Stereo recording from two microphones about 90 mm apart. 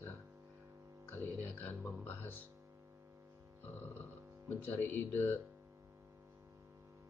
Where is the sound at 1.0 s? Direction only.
25° left (ahead or behind).